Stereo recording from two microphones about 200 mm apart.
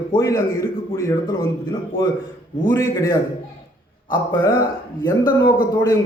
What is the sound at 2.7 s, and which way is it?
Speech, 15° left (ahead or behind).